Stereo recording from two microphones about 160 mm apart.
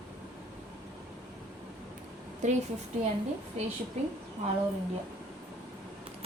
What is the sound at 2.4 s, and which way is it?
Speech, 50° right (ahead or behind).